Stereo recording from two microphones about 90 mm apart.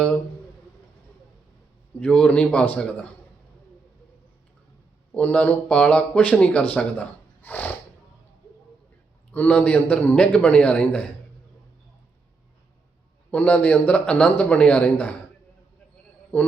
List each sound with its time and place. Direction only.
2.0 s speech: 15° left (ahead or behind)
5.1 s speech: 15° left (ahead or behind)
9.3 s speech: 15° left (ahead or behind)
13.3 s speech: 15° left (ahead or behind)